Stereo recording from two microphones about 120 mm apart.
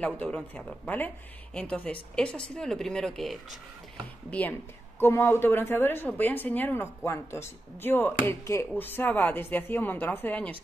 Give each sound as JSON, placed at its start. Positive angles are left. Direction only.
{"t": 0.0, "sound": "a woman's voice", "side_deg": 10}
{"t": 4.3, "sound": "a woman's voice", "side_deg": 15}